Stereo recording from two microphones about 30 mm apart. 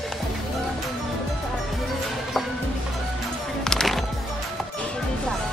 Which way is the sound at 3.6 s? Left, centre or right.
Centre.